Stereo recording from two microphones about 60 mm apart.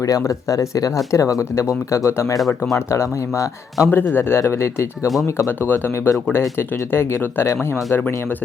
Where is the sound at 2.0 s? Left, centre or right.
Left.